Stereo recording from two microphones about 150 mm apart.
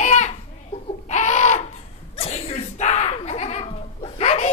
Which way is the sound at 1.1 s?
50° left (ahead or behind).